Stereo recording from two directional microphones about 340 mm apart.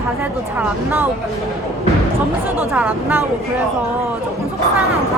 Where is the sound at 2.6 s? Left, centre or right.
Centre.